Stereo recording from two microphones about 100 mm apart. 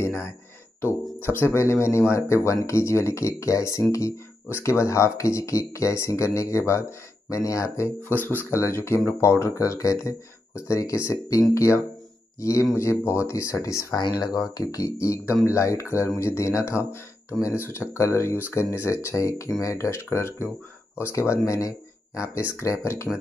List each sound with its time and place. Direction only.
0.0 s a sound: 25° left (ahead or behind)
1.4 s speech: 30° left (ahead or behind)
8.1 s speech: 15° left (ahead or behind)